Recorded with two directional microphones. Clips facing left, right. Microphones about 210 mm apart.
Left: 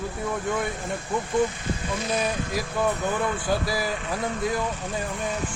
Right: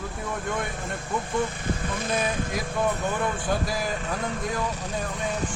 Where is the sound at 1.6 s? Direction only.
50° right (ahead or behind).